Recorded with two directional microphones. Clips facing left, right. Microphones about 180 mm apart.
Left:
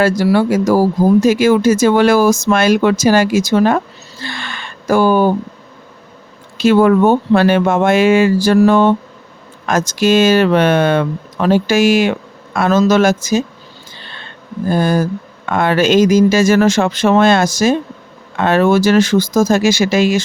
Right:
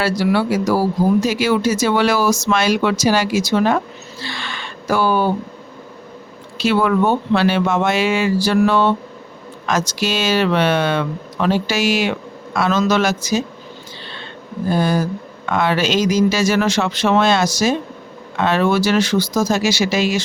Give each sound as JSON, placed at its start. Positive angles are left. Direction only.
{"t": 0.0, "sound": "speech", "side_deg": 45}
{"t": 4.2, "sound": "gasp", "side_deg": 50}
{"t": 6.6, "sound": "speech", "side_deg": 45}
{"t": 14.0, "sound": "a sound", "side_deg": 50}
{"t": 14.7, "sound": "speech", "side_deg": 50}